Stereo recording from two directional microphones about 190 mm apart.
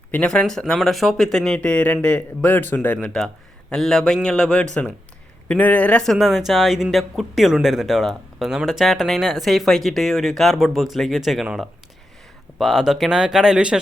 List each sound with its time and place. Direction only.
0.1 s speech: 5° left (ahead or behind)